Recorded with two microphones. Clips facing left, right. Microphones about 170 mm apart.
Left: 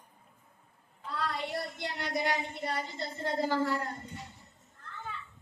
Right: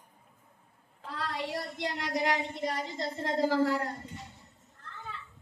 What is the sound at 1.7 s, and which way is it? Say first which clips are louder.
A woman's voice: right 2 dB; 90° right.